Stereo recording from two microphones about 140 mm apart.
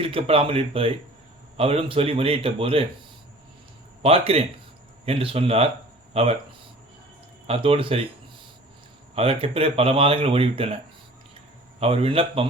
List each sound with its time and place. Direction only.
0.0 s speech: 40° right (ahead or behind)
4.0 s speech: 45° right (ahead or behind)
7.4 s speech: 45° right (ahead or behind)
9.1 s speech: 40° right (ahead or behind)
11.8 s speech: 40° right (ahead or behind)